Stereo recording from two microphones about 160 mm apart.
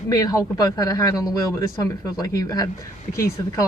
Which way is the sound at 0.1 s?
20° left (ahead or behind).